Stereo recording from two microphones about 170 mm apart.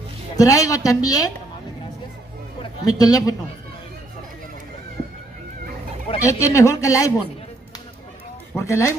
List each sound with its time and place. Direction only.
0.4 s speech: 20° left (ahead or behind)
2.6 s a man's voice: 20° left (ahead or behind)
6.1 s speech: 15° left (ahead or behind)
8.5 s speech: 15° left (ahead or behind)